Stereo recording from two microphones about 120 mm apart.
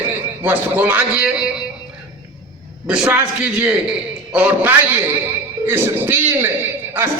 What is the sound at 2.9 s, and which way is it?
A man's voice, 10° right (ahead or behind).